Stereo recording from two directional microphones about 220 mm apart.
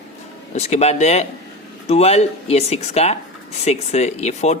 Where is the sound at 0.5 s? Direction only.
30° left (ahead or behind).